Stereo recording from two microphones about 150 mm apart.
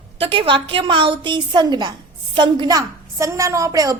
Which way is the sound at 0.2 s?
35° right (ahead or behind).